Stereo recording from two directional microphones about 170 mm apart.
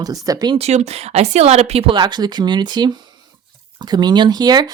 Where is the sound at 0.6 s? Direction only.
40° right (ahead or behind); by 4.7 s 25° right (ahead or behind).